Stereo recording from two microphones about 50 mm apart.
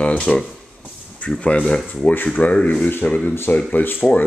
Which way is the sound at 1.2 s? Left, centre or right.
Centre.